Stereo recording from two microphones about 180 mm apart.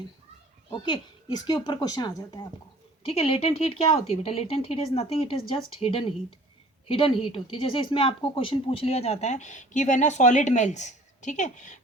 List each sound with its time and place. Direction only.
0.7 s a woman's voice: 25° left (ahead or behind); by 11.8 s 45° left (ahead or behind)